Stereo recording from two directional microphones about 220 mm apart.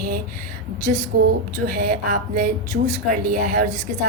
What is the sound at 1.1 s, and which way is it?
A woman's voice, 45° right (ahead or behind).